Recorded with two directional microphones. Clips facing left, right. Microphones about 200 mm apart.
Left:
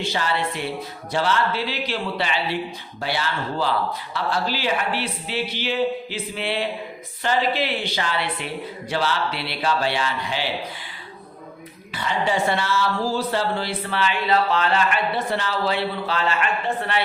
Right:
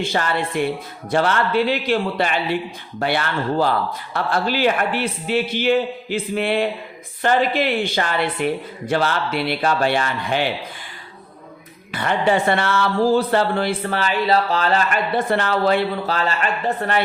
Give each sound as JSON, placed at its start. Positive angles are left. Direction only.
{"t": 0.0, "sound": "speech", "side_deg": -50}
{"t": 11.9, "sound": "speech", "side_deg": -60}